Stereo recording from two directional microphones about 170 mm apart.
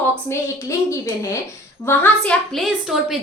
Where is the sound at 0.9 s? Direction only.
15° left (ahead or behind).